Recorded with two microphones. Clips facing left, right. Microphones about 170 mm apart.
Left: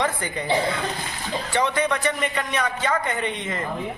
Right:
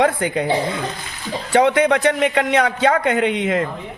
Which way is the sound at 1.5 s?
70° right (ahead or behind).